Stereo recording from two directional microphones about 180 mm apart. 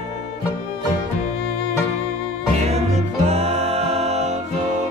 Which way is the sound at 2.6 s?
35° right (ahead or behind).